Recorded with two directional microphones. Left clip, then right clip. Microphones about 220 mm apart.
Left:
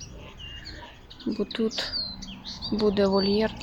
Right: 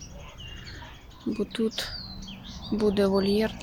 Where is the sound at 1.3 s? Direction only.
Centre (ahead or behind).